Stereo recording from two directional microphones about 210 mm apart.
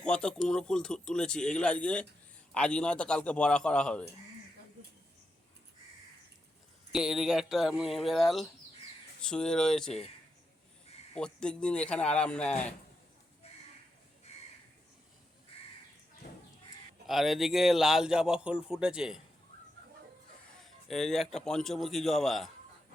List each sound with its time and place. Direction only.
0.0 s a man's voice: 5° left (ahead or behind)
6.9 s a man's voice: centre (ahead or behind)
11.1 s a man's voice: 5° left (ahead or behind)
16.2 s a sound: 45° left (ahead or behind)
17.1 s a man's voice: centre (ahead or behind)
20.7 s a sound: centre (ahead or behind)
21.3 s a man's voice: 5° left (ahead or behind)